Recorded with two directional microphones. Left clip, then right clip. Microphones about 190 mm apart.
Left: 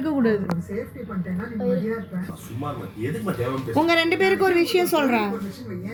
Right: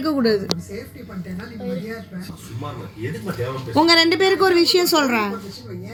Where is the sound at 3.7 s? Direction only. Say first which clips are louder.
Right 5 dB; 35° right (ahead or behind).